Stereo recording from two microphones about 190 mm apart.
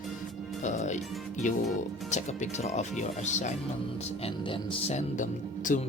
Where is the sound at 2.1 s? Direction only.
40° left (ahead or behind).